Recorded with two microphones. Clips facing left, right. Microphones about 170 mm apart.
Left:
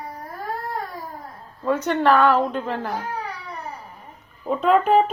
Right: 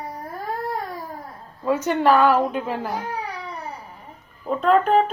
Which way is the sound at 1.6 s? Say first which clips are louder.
Even; 5° right (ahead or behind).